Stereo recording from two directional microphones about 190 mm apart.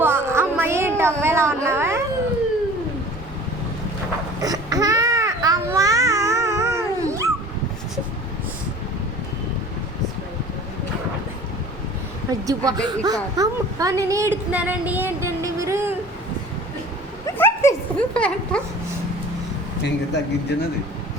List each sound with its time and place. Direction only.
0.0 s a sound: 15° right (ahead or behind)
4.4 s baby cry: 20° right (ahead or behind)
12.5 s a woman's voice: 20° right (ahead or behind)
17.2 s dog: 15° left (ahead or behind)
19.8 s speech: 65° left (ahead or behind)